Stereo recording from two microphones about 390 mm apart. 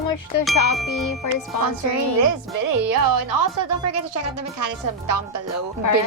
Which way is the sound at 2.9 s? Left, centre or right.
Right.